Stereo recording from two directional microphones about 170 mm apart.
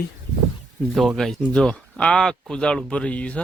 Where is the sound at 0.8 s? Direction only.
Centre (ahead or behind).